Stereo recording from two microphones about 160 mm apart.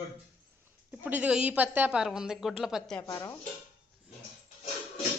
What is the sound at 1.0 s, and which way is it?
A woman's voice, 10° right (ahead or behind).